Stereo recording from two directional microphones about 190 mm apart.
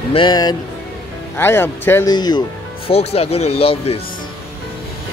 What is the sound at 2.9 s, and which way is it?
Speech, 30° left (ahead or behind).